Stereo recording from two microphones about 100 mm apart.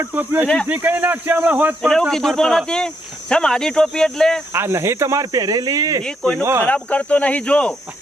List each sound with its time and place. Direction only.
0.0 s speech: 20° right (ahead or behind)
0.4 s cricket: 10° left (ahead or behind)
0.7 s speech: 20° right (ahead or behind)
1.8 s speech: 5° left (ahead or behind)
4.5 s speech: 25° right (ahead or behind)
6.7 s cricket: 15° left (ahead or behind)